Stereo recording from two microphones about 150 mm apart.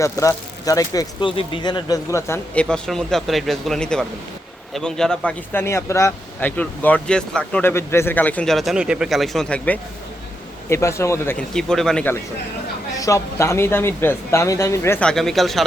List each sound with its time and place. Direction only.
0.0 s speech: 20° left (ahead or behind)
1.2 s speech: 35° left (ahead or behind); by 2.4 s 20° left (ahead or behind)
2.6 s a man's voice: 5° left (ahead or behind)
5.5 s a man's voice: 15° left (ahead or behind)
7.6 s a man's voice: 15° left (ahead or behind)
10.7 s speech: 20° left (ahead or behind)
11.3 s a man's voice: 5° left (ahead or behind)
13.0 s a man's voice: 20° left (ahead or behind); by 15.6 s centre (ahead or behind)